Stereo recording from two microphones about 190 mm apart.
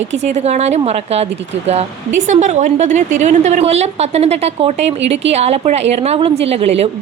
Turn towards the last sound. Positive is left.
turn(degrees=-35)  # may be behind; listen again after turning